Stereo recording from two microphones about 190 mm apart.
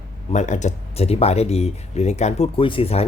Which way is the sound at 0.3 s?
40° left (ahead or behind).